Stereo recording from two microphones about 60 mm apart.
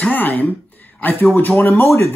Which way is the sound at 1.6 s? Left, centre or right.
Left.